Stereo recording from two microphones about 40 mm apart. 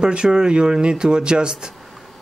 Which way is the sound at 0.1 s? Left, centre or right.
Right.